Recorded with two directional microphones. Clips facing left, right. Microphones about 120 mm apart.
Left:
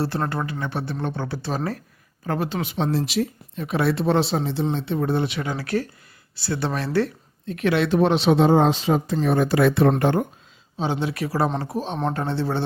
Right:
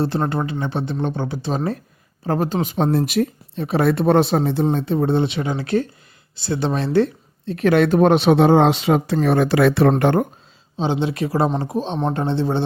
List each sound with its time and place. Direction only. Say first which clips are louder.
0.0 s speech: right 4 dB; 20° right (ahead or behind)
2.2 s speech: right 5 dB; 40° right (ahead or behind); by 3.2 s 55° right (ahead or behind)
3.5 s speech: right 4 dB; 35° right (ahead or behind)
3.8 s speech: right 5 dB; 50° right (ahead or behind)
4.9 s speech: right 4 dB; 25° right (ahead or behind)
7.5 s speech: right 5 dB; 45° right (ahead or behind); by 9.1 s 70° right (ahead or behind)
9.2 s speech: right 2 dB; 85° right
10.0 s speech: right 4 dB; 60° right (ahead or behind)
10.8 s speech: right 4 dB; 25° right (ahead or behind)